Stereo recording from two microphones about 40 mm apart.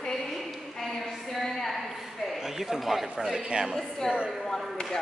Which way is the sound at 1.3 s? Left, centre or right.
Centre.